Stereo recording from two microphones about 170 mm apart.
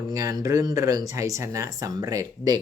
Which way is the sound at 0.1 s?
20° right (ahead or behind).